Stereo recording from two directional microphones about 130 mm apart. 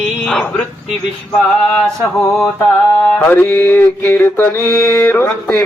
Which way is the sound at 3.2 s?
15° left (ahead or behind).